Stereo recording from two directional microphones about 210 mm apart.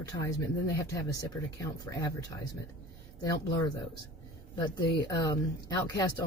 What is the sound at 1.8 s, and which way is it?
Speech, 15° left (ahead or behind).